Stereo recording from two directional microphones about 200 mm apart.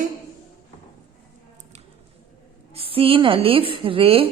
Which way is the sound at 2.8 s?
30° right (ahead or behind).